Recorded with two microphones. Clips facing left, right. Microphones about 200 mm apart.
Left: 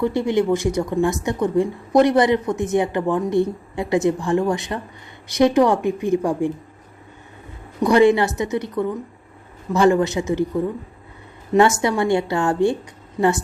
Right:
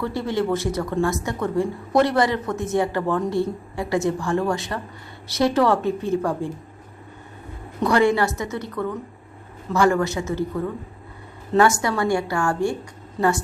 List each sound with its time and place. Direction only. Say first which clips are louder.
0.0 s speech: left 5 dB; 15° left (ahead or behind)
7.8 s a man's voice: left 4 dB; 15° left (ahead or behind)
11.8 s a man's voice: left 3 dB; 20° left (ahead or behind)